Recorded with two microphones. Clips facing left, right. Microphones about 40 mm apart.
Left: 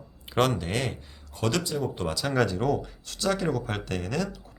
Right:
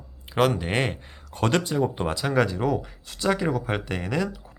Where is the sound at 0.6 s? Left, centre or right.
Right.